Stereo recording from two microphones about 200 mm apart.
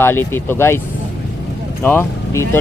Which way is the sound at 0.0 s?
10° left (ahead or behind).